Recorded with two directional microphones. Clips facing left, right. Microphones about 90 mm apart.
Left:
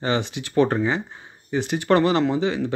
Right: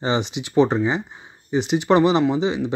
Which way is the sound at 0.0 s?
20° right (ahead or behind).